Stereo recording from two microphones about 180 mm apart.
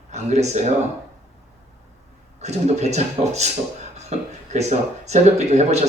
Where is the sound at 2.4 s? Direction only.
40° right (ahead or behind).